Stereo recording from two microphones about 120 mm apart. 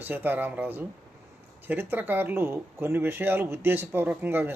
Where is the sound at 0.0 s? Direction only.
15° right (ahead or behind).